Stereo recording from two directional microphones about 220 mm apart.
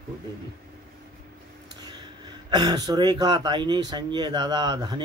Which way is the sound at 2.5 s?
20° right (ahead or behind).